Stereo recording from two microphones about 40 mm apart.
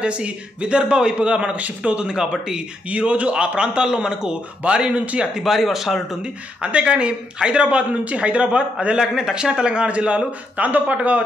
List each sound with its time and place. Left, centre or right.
0.0 s a man's voice: right
5.4 s speech: centre
6.6 s a man's voice: right